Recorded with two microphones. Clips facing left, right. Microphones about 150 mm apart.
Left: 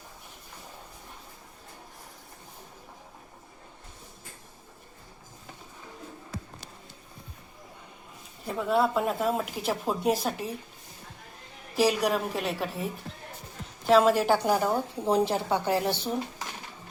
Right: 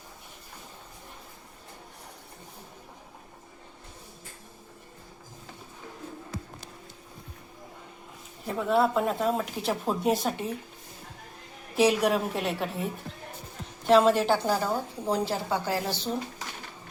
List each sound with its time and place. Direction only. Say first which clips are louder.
8.4 s a woman's voice: right 1 dB; centre (ahead or behind)
11.8 s a woman's voice: right 2 dB; centre (ahead or behind)
13.9 s a woman's voice: even; 5° left (ahead or behind)